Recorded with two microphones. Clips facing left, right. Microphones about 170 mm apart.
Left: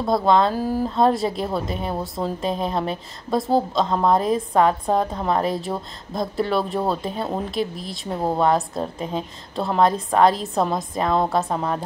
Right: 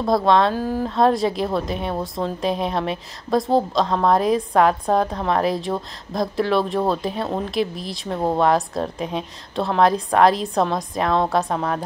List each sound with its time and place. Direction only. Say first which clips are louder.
0.0 s speech: right 1 dB; centre (ahead or behind)